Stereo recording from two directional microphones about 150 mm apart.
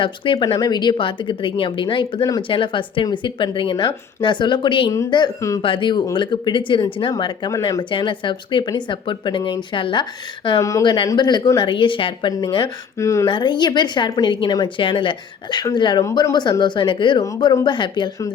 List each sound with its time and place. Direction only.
0.0 s speech: 30° left (ahead or behind)
10.6 s speech: 20° left (ahead or behind)
13.0 s speech: 20° left (ahead or behind)
13.2 s speech: 30° left (ahead or behind)